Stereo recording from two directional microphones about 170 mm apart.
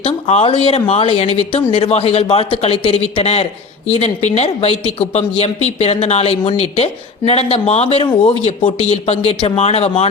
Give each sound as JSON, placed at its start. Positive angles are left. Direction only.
{"t": 0.0, "sound": "speech", "side_deg": 35}